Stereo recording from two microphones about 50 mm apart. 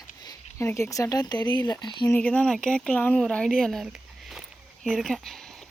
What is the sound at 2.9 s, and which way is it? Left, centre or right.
Speech, left.